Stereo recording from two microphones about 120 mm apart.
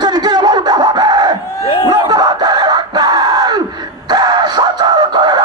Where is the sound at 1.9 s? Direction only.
35° right (ahead or behind).